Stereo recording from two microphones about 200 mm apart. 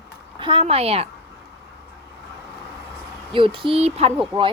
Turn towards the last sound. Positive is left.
turn(degrees=-5)  # may be behind; listen again after turning